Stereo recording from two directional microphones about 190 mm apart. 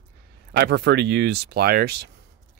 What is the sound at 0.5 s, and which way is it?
Speech, 60° right (ahead or behind).